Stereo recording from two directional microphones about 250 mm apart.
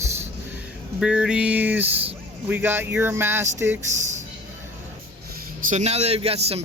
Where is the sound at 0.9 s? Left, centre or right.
Centre.